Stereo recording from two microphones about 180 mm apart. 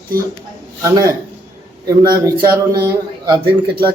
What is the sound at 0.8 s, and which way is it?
A man's voice, 15° right (ahead or behind).